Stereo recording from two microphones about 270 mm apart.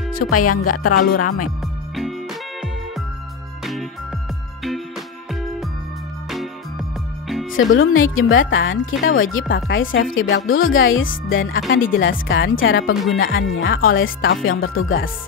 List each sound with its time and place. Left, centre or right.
0.3 s speech: left
5.3 s music: centre
7.5 s speech: left
13.7 s speech: left
13.9 s speech: left